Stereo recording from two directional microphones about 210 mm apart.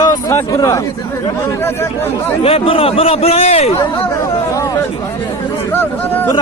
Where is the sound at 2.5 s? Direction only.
25° left (ahead or behind).